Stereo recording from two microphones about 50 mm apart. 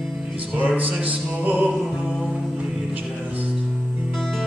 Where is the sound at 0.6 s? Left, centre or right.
Right.